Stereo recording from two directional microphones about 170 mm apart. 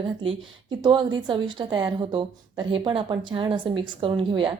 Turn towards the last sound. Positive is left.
turn(degrees=-30)  # may be behind; listen again after turning